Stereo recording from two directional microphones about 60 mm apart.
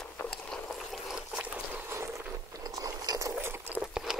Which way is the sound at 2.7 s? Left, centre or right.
Right.